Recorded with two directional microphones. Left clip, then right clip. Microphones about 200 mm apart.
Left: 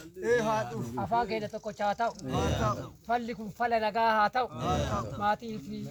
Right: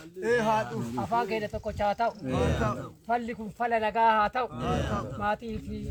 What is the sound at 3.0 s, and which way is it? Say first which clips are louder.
Speech: right 1 dB; 5° right (ahead or behind).